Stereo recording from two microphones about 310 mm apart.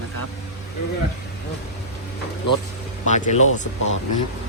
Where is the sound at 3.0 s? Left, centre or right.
Left.